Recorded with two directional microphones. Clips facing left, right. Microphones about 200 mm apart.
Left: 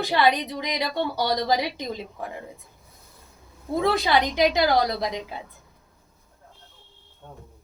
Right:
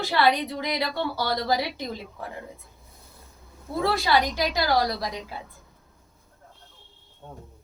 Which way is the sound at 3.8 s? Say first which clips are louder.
Left 1 dB; 20° left (ahead or behind).